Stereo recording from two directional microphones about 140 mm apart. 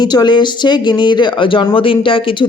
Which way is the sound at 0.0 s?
30° left (ahead or behind).